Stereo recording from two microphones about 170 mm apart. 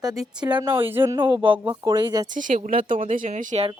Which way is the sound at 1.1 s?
30° right (ahead or behind).